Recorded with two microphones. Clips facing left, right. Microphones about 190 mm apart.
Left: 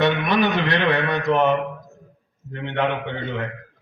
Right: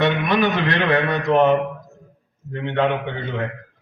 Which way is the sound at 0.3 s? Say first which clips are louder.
Right 1 dB; 50° right (ahead or behind).